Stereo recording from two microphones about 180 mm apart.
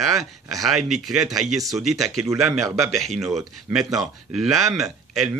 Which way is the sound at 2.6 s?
15° right (ahead or behind).